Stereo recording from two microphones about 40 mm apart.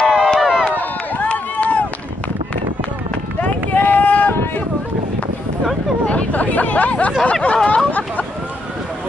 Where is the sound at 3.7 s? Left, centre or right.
Left.